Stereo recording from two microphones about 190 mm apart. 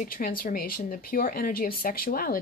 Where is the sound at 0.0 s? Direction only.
50° left (ahead or behind).